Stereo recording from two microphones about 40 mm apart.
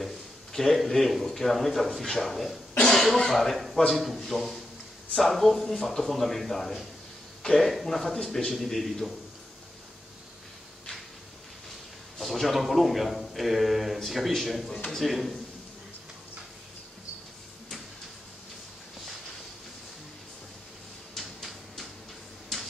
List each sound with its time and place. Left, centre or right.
0.0 s a man's voice: centre
2.8 s cough: centre
3.3 s a man's voice: centre
8.1 s a man's voice: centre
8.5 s a man's voice: centre
12.2 s a man's voice: centre
21.2 s tick-tock: centre